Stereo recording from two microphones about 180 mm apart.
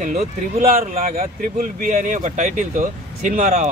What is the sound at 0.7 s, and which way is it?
Speech, 50° right (ahead or behind).